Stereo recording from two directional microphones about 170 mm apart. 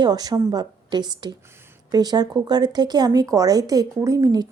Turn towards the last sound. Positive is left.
turn(degrees=-20)  # may be behind; listen again after turning